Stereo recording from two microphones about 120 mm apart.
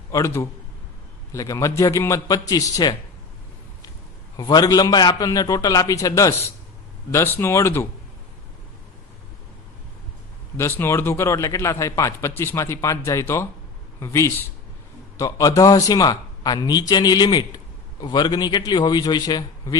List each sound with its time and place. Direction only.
0.1 s a man's voice: 25° left (ahead or behind)
4.4 s a man's voice: 35° left (ahead or behind)
10.6 s a man's voice: 20° left (ahead or behind)